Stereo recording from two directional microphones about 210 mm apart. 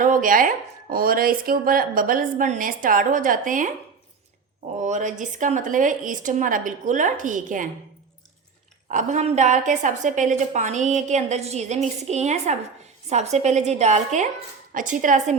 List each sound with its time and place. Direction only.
0.0 s speech: 40° right (ahead or behind)
4.8 s speech: 35° right (ahead or behind)
8.9 s speech: 35° right (ahead or behind)